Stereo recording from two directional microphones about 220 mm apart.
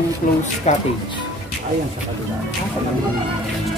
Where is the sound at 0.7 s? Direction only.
30° left (ahead or behind).